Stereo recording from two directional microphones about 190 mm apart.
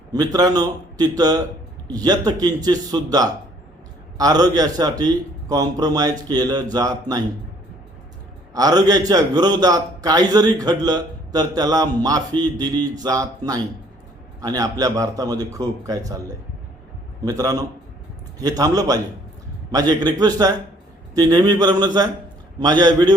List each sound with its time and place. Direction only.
0.1 s a man's voice: 20° right (ahead or behind)
8.5 s a man's voice: 20° right (ahead or behind)
17.2 s a man's voice: 20° right (ahead or behind)